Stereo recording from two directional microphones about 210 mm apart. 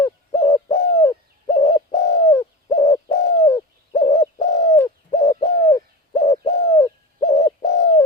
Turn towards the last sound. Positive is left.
turn(degrees=20)  # may be behind; listen again after turning